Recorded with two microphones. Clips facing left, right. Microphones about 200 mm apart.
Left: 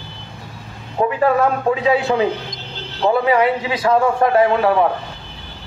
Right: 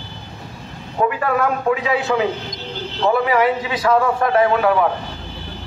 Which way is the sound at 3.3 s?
25° left (ahead or behind).